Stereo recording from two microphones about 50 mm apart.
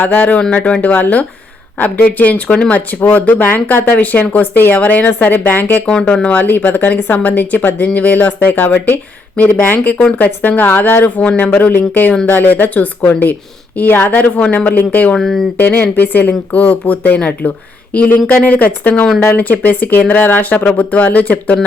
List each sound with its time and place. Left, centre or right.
0.0 s speech: left
3.8 s speech: left
5.8 s speech: centre
6.3 s speech: left
11.2 s speech: left
15.2 s speech: centre
15.5 s speech: left